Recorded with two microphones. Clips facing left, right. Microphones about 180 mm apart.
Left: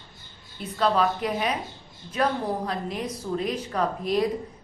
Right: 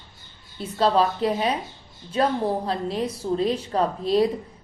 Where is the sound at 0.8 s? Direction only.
30° right (ahead or behind).